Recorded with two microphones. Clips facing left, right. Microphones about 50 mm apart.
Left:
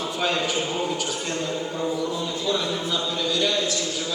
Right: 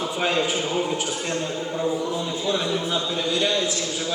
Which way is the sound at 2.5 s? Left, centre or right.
Centre.